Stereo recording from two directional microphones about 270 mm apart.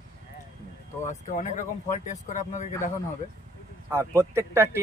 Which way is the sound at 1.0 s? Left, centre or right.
Left.